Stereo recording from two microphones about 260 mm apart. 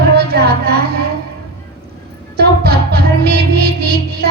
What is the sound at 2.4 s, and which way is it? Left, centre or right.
Music, right.